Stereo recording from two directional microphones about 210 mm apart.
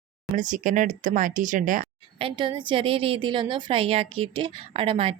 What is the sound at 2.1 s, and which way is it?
A woman's voice, 25° right (ahead or behind).